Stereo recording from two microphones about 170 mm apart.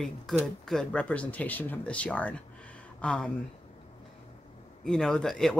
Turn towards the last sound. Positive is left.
turn(degrees=5)  # may be behind; listen again after turning